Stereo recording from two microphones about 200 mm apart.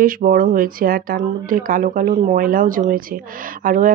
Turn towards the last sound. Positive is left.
turn(degrees=-40)  # may be behind; listen again after turning